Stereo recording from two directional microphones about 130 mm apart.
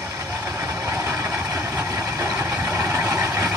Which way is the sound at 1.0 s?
20° right (ahead or behind).